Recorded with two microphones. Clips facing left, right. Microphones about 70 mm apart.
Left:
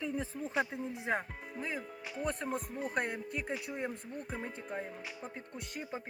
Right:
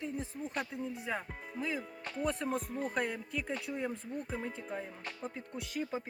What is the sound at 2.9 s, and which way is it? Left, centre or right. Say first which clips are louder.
Music: left 2 dB; left.